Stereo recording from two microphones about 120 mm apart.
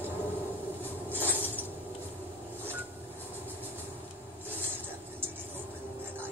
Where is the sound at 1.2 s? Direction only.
15° right (ahead or behind).